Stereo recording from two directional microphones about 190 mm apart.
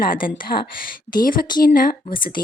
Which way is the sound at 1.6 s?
50° left (ahead or behind).